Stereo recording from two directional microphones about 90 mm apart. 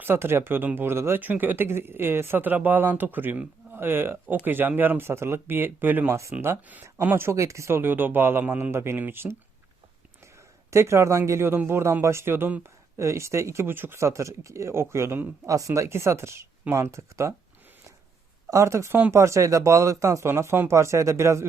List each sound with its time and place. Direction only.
0.0 s speech: 25° right (ahead or behind)
10.7 s speech: 30° right (ahead or behind)
13.0 s speech: 30° right (ahead or behind)
18.4 s speech: 35° right (ahead or behind)